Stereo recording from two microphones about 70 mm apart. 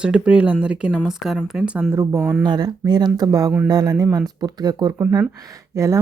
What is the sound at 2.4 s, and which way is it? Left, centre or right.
Speech, right.